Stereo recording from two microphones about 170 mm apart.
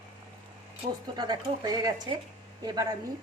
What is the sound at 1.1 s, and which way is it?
A woman's voice, 25° right (ahead or behind).